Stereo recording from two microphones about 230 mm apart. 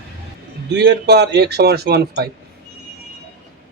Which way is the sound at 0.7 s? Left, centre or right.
Right.